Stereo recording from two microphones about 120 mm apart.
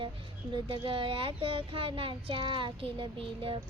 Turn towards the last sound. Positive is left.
turn(degrees=-45)  # may be behind; listen again after turning